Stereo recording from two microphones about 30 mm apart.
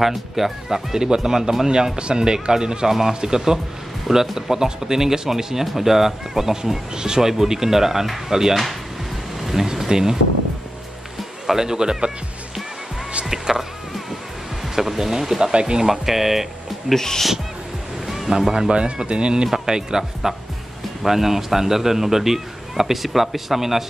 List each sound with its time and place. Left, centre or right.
0.0 s speech: centre
0.9 s speech: right
2.0 s speech: right; by 8.5 s centre
9.4 s a sound: centre
9.8 s speech: centre
11.1 s music: centre
11.6 s speech: right
13.3 s music: centre
14.8 s speech: centre
16.9 s speech: centre
18.0 s music: centre
18.7 s speech: right
21.0 s speech: centre